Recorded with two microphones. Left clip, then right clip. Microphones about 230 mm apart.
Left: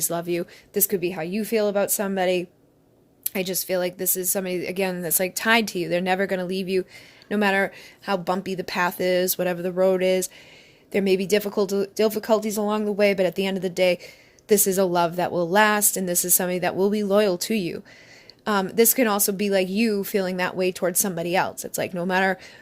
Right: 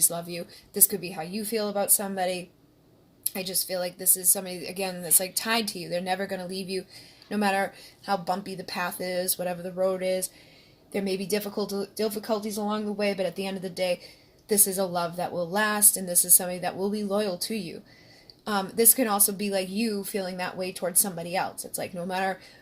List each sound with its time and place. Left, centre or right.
0.1 s speech: left
0.9 s speech: left
1.5 s speech: left
1.7 s speech: left
3.3 s speech: left
4.4 s speech: left
4.9 s speech: left
5.5 s speech: left
6.1 s speech: left